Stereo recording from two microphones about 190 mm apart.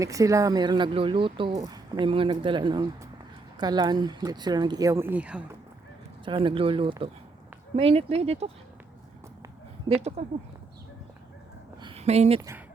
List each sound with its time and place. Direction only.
0.0 s speech: 15° right (ahead or behind)
6.2 s speech: 25° right (ahead or behind)
10.0 s speech: 35° right (ahead or behind)
11.8 s a sound: 30° right (ahead or behind)
12.4 s speech: 15° right (ahead or behind)